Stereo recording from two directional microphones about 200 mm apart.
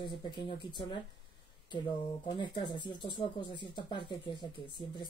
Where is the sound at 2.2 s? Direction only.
25° left (ahead or behind).